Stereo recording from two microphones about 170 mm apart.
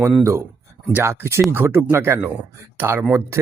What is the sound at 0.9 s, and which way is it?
Speech, 15° right (ahead or behind).